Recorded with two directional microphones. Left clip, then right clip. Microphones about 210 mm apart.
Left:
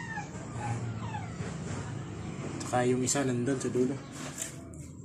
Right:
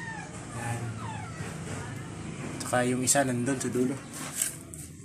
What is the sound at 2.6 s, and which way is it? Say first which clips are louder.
Speech: right 1 dB; 25° right (ahead or behind).